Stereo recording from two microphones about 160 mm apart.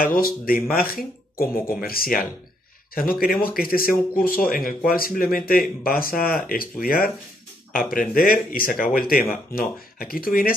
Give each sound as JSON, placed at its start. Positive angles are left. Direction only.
{"t": 0.0, "sound": "speech", "side_deg": 65}